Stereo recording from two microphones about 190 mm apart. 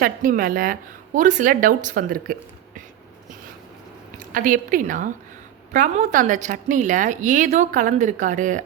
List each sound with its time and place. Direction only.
0.0 s a woman's voice: 45° right (ahead or behind)
4.3 s a woman's voice: 45° right (ahead or behind)